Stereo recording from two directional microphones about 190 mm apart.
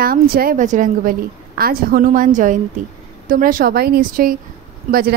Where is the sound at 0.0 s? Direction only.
50° right (ahead or behind).